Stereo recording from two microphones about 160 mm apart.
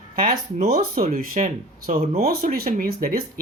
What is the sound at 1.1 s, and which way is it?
Speech, 45° right (ahead or behind).